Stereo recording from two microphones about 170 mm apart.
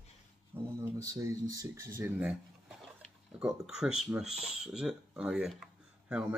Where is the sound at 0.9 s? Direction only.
20° right (ahead or behind).